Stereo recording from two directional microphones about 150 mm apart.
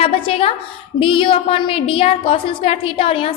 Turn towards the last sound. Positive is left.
turn(degrees=40)  # may be behind; listen again after turning